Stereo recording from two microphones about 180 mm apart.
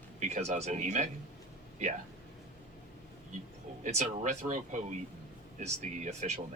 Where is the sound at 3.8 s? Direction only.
45° right (ahead or behind).